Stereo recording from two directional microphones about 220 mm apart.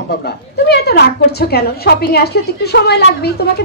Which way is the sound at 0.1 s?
50° left (ahead or behind).